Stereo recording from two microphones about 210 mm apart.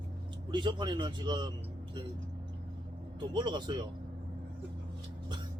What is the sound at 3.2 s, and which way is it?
Speech, 20° right (ahead or behind).